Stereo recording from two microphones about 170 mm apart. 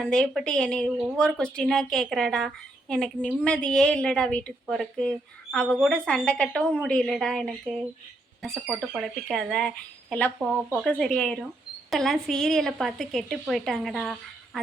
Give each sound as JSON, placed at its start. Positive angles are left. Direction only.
{"t": 0.0, "sound": "a woman's voice", "side_deg": 0}